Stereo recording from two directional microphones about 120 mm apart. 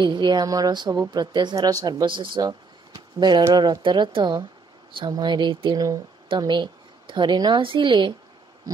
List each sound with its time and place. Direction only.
0.0 s speech: 40° right (ahead or behind)